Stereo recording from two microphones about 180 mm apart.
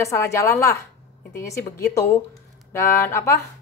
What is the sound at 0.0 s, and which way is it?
A woman's voice, 15° left (ahead or behind).